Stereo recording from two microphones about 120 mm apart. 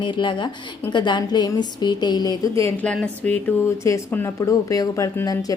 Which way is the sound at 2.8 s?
10° left (ahead or behind).